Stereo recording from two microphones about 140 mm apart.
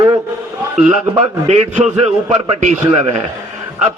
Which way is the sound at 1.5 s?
50° right (ahead or behind).